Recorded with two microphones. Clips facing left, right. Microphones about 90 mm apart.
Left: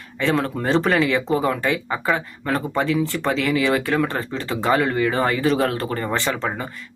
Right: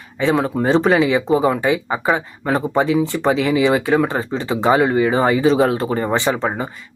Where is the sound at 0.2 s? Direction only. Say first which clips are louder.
Right 4 dB; 15° right (ahead or behind).